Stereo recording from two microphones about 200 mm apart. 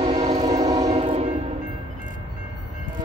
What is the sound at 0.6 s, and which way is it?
Train, 20° right (ahead or behind).